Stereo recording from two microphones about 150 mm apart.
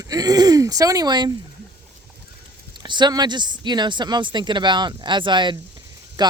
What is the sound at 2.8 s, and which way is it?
Speech, 30° right (ahead or behind).